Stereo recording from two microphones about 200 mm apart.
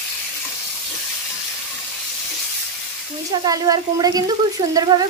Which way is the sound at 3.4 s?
20° right (ahead or behind).